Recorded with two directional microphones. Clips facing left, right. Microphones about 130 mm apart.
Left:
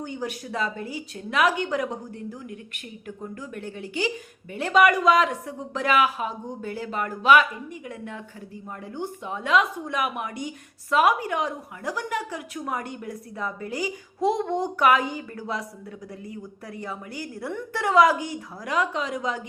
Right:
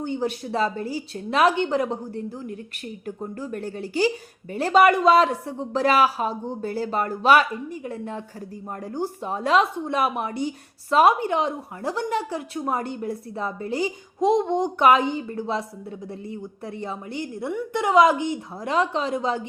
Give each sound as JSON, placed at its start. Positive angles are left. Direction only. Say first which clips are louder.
{"t": 0.0, "sound": "a woman's voice", "louder": "right 5 dB", "side_deg": -30}